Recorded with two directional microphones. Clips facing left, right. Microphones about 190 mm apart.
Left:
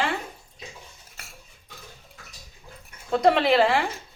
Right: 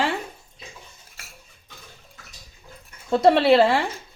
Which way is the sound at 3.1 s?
30° right (ahead or behind).